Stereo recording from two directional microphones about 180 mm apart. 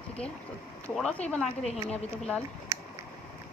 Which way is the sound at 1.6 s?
35° left (ahead or behind).